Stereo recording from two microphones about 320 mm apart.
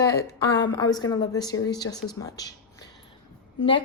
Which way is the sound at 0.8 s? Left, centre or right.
Centre.